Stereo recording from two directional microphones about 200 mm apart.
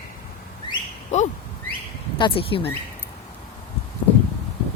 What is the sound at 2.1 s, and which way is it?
Speech, 25° left (ahead or behind).